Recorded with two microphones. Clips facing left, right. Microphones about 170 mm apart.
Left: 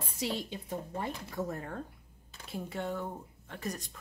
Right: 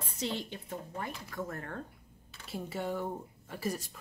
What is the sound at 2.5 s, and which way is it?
Speech, 5° right (ahead or behind).